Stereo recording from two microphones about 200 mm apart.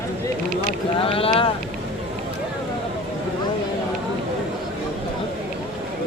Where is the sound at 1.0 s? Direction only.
25° left (ahead or behind).